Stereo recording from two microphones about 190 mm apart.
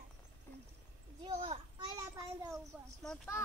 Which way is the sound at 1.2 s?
30° right (ahead or behind).